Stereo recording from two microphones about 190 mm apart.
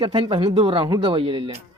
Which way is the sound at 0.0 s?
25° right (ahead or behind).